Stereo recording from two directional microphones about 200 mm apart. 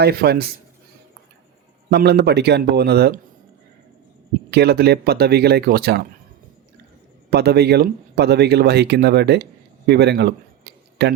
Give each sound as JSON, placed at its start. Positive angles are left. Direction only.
{"t": 0.0, "sound": "speech", "side_deg": -50}
{"t": 1.9, "sound": "speech", "side_deg": -55}
{"t": 4.5, "sound": "speech", "side_deg": -55}
{"t": 7.3, "sound": "speech", "side_deg": -55}